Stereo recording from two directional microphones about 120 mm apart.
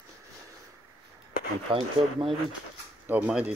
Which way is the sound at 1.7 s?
45° right (ahead or behind).